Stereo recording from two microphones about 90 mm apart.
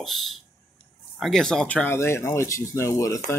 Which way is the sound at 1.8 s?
30° left (ahead or behind).